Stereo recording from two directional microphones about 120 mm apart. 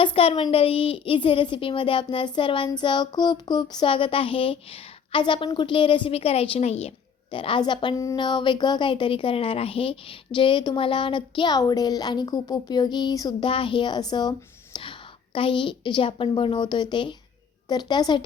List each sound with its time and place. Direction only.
0.0 s a woman's voice: 50° left (ahead or behind)
13.5 s a woman's voice: 45° left (ahead or behind)